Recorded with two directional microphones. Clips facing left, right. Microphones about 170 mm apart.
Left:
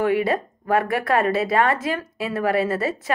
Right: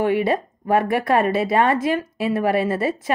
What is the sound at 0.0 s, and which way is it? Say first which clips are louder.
Speech: right 1 dB; 25° right (ahead or behind).